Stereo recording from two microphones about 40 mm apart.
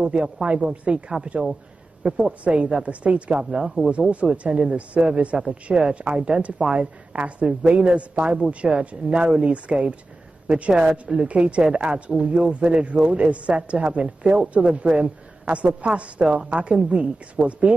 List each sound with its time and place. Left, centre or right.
0.0 s speech: right
3.6 s speech: centre
4.4 s speech: right